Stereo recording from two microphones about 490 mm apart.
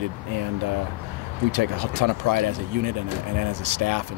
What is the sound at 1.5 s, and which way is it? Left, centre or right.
Speech, right.